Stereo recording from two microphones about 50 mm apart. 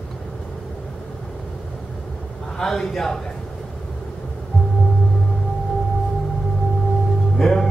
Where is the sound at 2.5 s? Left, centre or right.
Centre.